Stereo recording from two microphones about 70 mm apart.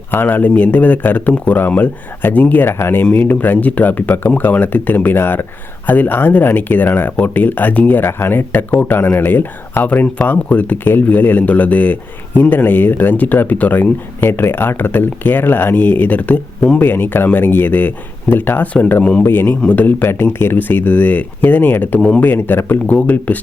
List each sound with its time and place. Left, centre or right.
0.1 s a man's voice: left